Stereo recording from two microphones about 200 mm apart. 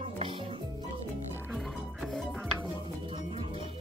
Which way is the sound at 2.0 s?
Centre (ahead or behind).